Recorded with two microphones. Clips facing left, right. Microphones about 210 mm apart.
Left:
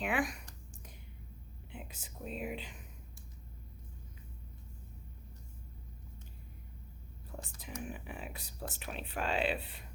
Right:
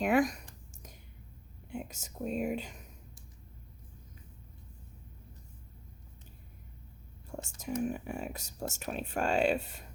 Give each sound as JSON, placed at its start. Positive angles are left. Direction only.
{"t": 0.0, "sound": "speech", "side_deg": -40}
{"t": 1.7, "sound": "speech", "side_deg": -45}
{"t": 7.6, "sound": "speech", "side_deg": -45}